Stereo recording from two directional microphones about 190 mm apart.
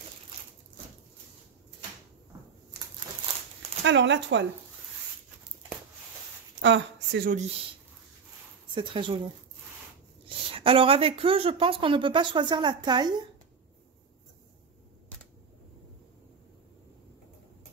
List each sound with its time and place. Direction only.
3.8 s speech: 70° right (ahead or behind)
6.6 s speech: 65° right (ahead or behind)
8.7 s speech: 25° right (ahead or behind)